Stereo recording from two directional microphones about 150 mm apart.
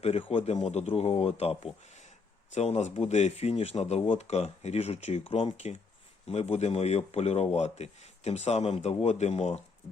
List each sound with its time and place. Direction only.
0.0 s speech: 40° left (ahead or behind)